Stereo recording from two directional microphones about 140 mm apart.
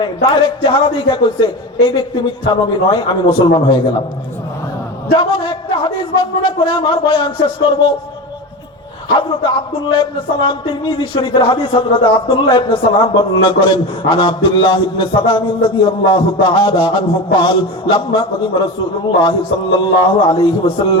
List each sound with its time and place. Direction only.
0.0 s speech: 40° left (ahead or behind)
2.5 s speech: 40° left (ahead or behind)
5.1 s speech: 40° left (ahead or behind)
9.1 s speech: 35° left (ahead or behind)